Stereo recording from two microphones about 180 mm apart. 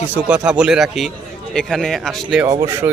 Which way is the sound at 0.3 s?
5° right (ahead or behind).